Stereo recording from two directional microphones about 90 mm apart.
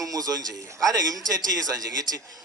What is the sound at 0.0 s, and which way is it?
A man's voice, 45° right (ahead or behind).